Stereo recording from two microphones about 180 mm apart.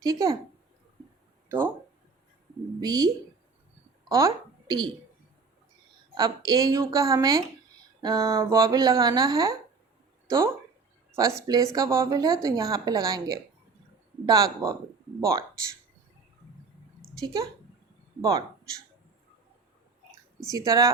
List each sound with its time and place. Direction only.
0.0 s a woman's voice: 20° right (ahead or behind)
1.5 s speech: 10° right (ahead or behind)
2.8 s a woman's voice: 20° right (ahead or behind)
4.1 s a woman's voice: 15° right (ahead or behind)
6.1 s a woman's voice: 20° right (ahead or behind)
17.2 s a woman's voice: 20° right (ahead or behind)
20.5 s a woman's voice: 20° right (ahead or behind)